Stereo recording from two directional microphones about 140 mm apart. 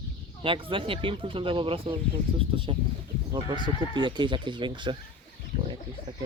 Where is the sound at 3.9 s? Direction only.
35° right (ahead or behind).